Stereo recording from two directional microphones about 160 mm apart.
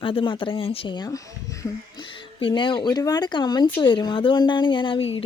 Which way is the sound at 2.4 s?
30° left (ahead or behind).